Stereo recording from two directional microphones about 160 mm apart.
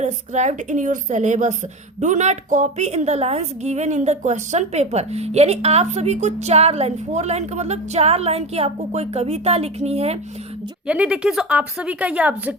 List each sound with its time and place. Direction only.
0.0 s a woman's voice: 45° right (ahead or behind)
10.8 s a woman's voice: 5° right (ahead or behind)